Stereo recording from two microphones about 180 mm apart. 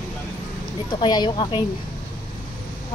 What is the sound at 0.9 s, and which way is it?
Speech, 25° left (ahead or behind).